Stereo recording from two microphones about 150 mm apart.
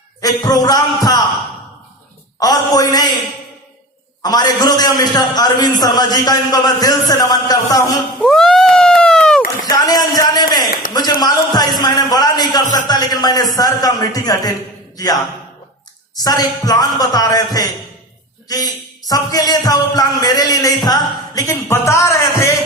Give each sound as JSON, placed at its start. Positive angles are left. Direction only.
{"t": 0.2, "sound": "a man's voice", "side_deg": 25}
{"t": 2.4, "sound": "a man's voice", "side_deg": 25}
{"t": 4.2, "sound": "a man's voice", "side_deg": 25}
{"t": 8.2, "sound": "a sound", "side_deg": 5}
{"t": 9.6, "sound": "a sound", "side_deg": 25}
{"t": 13.6, "sound": "a man's voice", "side_deg": 25}